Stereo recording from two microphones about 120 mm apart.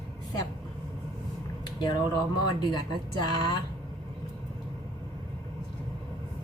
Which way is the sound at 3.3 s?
40° left (ahead or behind).